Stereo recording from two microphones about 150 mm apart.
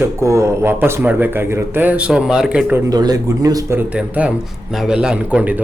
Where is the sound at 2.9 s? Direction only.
25° right (ahead or behind).